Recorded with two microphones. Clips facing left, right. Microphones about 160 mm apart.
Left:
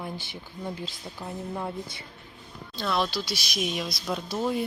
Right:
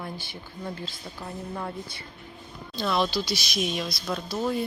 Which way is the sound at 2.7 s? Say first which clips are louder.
Right 2 dB; centre (ahead or behind).